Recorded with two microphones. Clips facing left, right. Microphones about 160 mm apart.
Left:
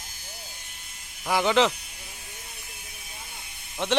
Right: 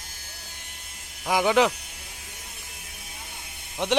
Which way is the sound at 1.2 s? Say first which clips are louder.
Right 1 dB; 10° right (ahead or behind).